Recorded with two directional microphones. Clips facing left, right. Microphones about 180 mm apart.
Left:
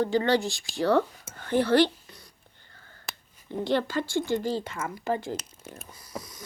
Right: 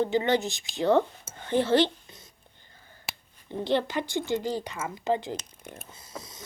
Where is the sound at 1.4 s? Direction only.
20° right (ahead or behind).